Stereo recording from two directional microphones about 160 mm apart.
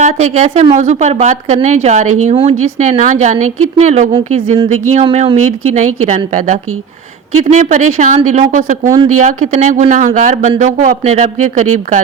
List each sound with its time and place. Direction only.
0.0 s a woman's voice: 45° right (ahead or behind)